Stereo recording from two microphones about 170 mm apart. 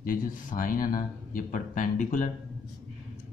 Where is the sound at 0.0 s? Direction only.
55° left (ahead or behind).